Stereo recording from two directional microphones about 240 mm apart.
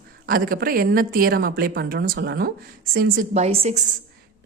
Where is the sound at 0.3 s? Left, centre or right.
Right.